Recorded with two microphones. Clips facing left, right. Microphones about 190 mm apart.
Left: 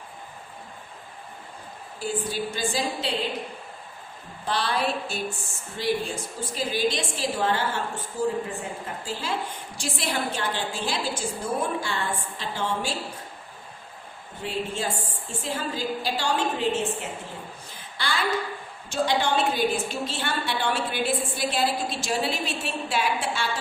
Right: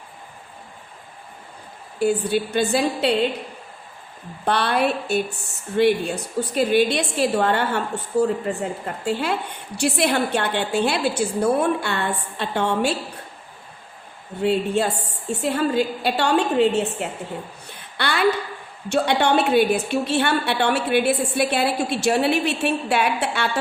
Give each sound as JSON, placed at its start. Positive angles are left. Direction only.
{"t": 2.0, "sound": "a woman's voice", "side_deg": -65}
{"t": 4.4, "sound": "a woman's voice", "side_deg": -60}
{"t": 14.4, "sound": "a woman's voice", "side_deg": -65}
{"t": 17.7, "sound": "a sound", "side_deg": -65}
{"t": 18.9, "sound": "a woman's voice", "side_deg": -65}